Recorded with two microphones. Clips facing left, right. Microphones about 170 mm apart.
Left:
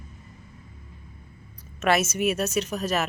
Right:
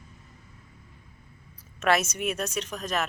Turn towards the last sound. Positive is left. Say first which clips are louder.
# left 4 dB
turn(degrees=5)  # may be behind; listen again after turning